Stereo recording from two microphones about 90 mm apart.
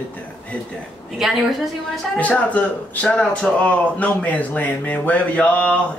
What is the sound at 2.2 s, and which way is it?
Speech, 15° left (ahead or behind).